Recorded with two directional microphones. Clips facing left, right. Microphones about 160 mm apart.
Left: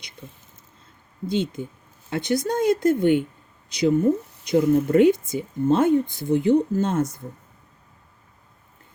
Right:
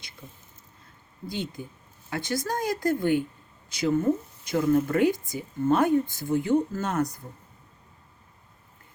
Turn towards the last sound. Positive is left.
turn(degrees=25)  # may be behind; listen again after turning